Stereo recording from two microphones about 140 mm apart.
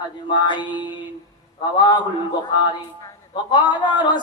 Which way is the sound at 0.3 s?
35° left (ahead or behind).